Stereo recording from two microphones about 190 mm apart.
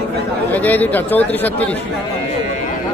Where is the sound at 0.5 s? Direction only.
10° left (ahead or behind).